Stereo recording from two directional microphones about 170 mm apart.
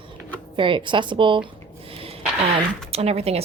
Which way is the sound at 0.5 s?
30° right (ahead or behind).